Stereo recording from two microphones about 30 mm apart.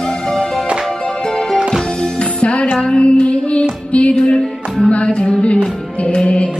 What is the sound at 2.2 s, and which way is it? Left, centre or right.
Music, left.